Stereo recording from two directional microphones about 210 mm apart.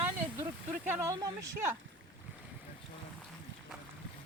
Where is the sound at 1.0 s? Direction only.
15° right (ahead or behind).